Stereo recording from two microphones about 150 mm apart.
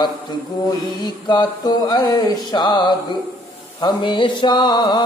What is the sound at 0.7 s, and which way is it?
Mantra, 25° left (ahead or behind).